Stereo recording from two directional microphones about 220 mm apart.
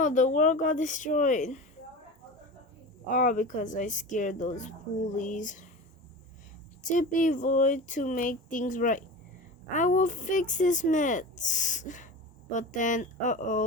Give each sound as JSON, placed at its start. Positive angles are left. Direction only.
{"t": 0.0, "sound": "speech", "side_deg": 35}
{"t": 3.1, "sound": "speech", "side_deg": 35}
{"t": 6.8, "sound": "speech", "side_deg": 35}